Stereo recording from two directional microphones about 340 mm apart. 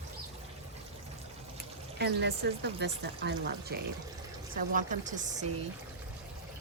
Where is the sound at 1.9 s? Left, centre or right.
Right.